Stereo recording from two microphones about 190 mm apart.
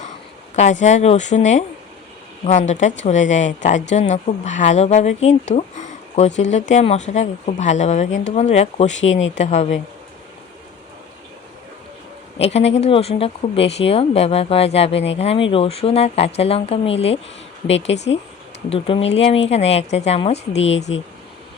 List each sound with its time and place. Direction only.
0.5 s a woman's voice: 40° left (ahead or behind)
12.4 s a woman's voice: 35° left (ahead or behind)
17.7 s speech: 75° left (ahead or behind)
17.9 s a woman's voice: 35° left (ahead or behind)
20.9 s speech: 90° left